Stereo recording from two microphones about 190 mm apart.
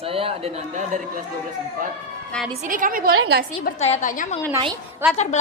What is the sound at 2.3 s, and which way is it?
Speech, 5° left (ahead or behind).